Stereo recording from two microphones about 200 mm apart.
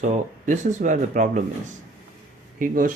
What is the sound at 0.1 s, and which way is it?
Speech, 35° right (ahead or behind).